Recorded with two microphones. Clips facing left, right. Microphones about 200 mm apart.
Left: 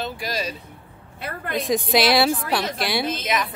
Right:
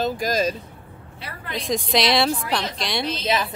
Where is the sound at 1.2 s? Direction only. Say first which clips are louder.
Left 5 dB; 50° left (ahead or behind).